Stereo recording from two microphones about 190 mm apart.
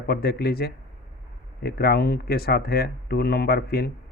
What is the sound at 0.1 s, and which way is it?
Speech, 55° left (ahead or behind).